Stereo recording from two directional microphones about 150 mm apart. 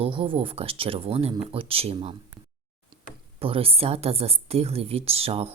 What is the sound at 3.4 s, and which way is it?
Speech, 40° right (ahead or behind).